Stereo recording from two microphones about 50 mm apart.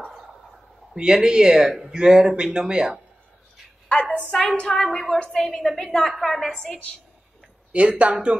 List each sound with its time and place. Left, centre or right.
0.1 s a sound: centre
0.9 s speech: centre
3.9 s a woman's voice: left
4.3 s a woman's voice: centre
8.0 s speech: right